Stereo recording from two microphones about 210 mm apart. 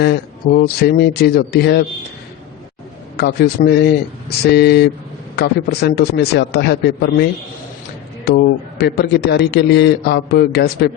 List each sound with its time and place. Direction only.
0.0 s a man's voice: 50° left (ahead or behind)
3.2 s a man's voice: 50° left (ahead or behind)